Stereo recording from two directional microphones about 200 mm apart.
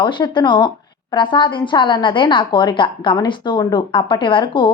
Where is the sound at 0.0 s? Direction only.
25° left (ahead or behind).